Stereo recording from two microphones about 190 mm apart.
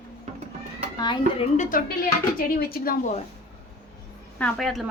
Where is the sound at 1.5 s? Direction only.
45° left (ahead or behind).